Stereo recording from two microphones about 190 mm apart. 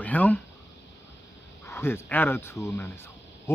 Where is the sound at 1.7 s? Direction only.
15° left (ahead or behind).